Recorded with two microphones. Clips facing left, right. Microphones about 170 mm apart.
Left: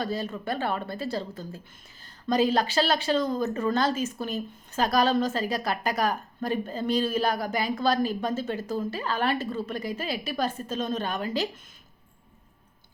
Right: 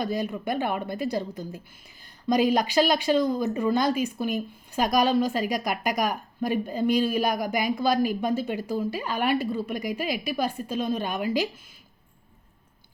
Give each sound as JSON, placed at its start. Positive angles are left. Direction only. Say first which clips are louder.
{"t": 0.0, "sound": "speech", "louder": "right 2 dB", "side_deg": -15}